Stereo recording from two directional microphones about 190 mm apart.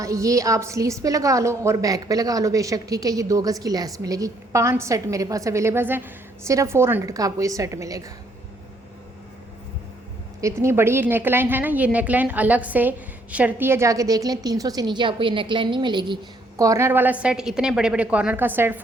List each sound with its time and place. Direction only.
0.0 s a woman's voice: 15° right (ahead or behind)
10.4 s a woman's voice: 15° right (ahead or behind)